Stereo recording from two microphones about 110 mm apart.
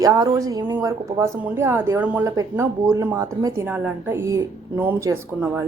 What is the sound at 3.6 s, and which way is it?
A woman's voice, 15° right (ahead or behind).